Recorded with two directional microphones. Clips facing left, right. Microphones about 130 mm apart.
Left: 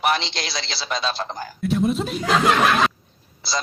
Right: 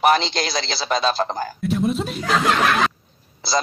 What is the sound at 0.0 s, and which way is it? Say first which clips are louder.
A man's voice: right 5 dB; 45° right (ahead or behind).